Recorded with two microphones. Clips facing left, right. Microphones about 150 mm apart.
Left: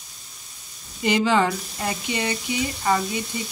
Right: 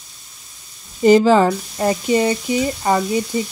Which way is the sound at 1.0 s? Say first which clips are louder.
Right 9 dB; 40° right (ahead or behind).